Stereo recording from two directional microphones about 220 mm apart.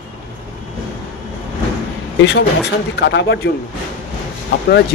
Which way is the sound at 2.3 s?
50° left (ahead or behind).